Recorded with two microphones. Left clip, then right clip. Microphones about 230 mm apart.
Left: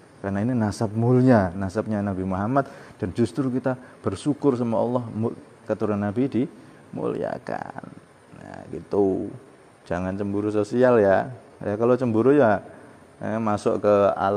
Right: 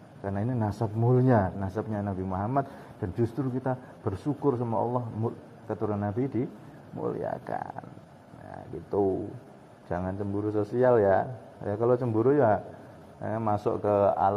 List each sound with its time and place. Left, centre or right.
0.2 s a man's voice: left